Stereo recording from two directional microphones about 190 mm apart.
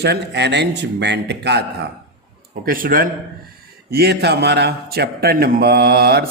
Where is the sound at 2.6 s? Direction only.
50° right (ahead or behind).